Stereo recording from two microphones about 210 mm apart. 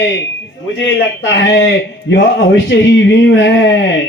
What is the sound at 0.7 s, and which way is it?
A man's voice, 60° left (ahead or behind).